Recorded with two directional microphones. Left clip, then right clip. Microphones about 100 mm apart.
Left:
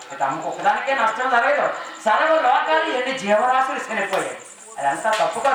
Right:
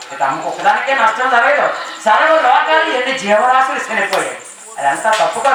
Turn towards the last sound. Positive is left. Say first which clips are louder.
# right 6 dB
turn(degrees=10)  # may be behind; listen again after turning